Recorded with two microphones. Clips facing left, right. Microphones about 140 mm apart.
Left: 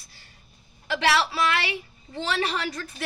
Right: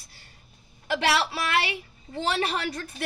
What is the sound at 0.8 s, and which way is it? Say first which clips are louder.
Speech: left 1 dB; 50° right (ahead or behind).